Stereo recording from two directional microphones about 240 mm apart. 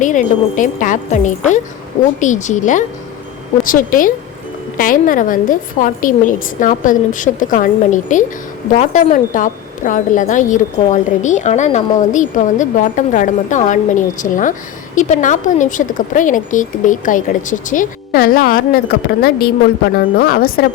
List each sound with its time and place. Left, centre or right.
0.0 s a woman's voice: left